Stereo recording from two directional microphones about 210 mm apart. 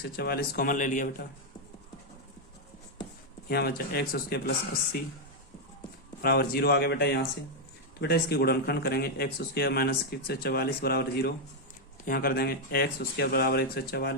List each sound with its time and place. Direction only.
0.0 s speech: 45° left (ahead or behind)
3.5 s speech: 45° left (ahead or behind)
6.2 s speech: 45° left (ahead or behind)